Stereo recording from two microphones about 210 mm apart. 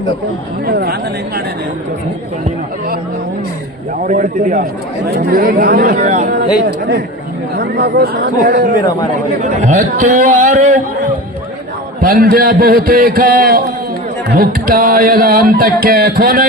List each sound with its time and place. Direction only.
0.6 s mantra: 45° right (ahead or behind)
4.0 s a man's voice: 40° right (ahead or behind)
5.0 s mantra: 45° right (ahead or behind)
6.7 s mantra: 50° right (ahead or behind)
9.4 s a man's voice: 35° right (ahead or behind)
12.0 s mantra: 45° right (ahead or behind)